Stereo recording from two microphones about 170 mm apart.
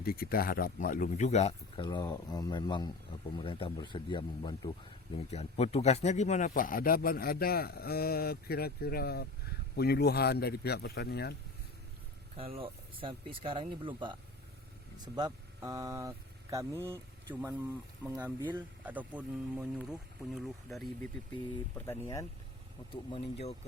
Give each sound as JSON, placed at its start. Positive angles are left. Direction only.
{"t": 0.0, "sound": "speech", "side_deg": 60}
{"t": 12.4, "sound": "speech", "side_deg": -35}
{"t": 21.8, "sound": "speech", "side_deg": 15}
{"t": 23.1, "sound": "speech", "side_deg": 35}